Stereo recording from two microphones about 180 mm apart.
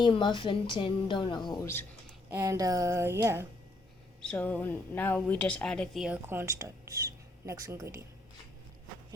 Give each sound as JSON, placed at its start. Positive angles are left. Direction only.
{"t": 0.0, "sound": "a woman's voice", "side_deg": 25}
{"t": 2.3, "sound": "speech", "side_deg": -15}
{"t": 4.2, "sound": "a woman's voice", "side_deg": 10}
{"t": 6.2, "sound": "speech", "side_deg": -15}